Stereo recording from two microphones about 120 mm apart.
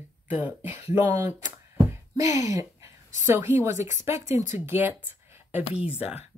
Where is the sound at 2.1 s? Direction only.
30° right (ahead or behind).